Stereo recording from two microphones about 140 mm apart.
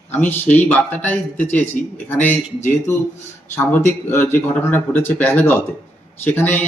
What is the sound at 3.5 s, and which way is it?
Speech, 15° left (ahead or behind).